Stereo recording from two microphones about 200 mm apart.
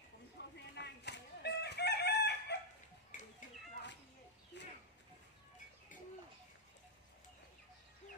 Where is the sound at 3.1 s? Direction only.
40° left (ahead or behind).